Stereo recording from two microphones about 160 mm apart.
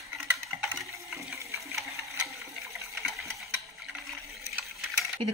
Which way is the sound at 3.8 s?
Centre (ahead or behind).